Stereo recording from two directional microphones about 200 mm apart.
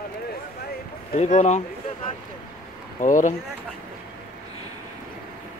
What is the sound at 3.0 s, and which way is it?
Speech, 40° left (ahead or behind).